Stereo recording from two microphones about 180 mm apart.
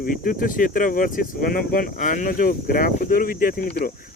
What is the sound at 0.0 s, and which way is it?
Speech, 50° left (ahead or behind).